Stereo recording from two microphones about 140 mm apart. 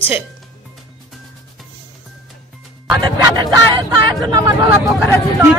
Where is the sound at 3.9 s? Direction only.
30° right (ahead or behind).